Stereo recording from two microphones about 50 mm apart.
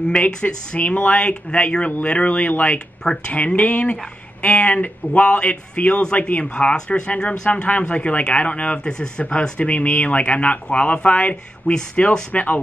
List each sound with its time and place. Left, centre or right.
0.2 s speech: left
3.0 s speech: centre
3.3 s speech: left
11.7 s speech: centre
12.3 s speech: left